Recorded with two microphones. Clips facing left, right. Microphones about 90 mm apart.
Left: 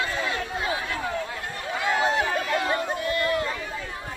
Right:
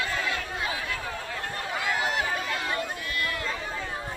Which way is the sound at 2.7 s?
25° left (ahead or behind).